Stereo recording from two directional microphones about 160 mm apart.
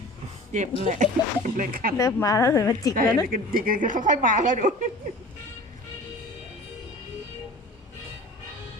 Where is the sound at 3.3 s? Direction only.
60° right (ahead or behind).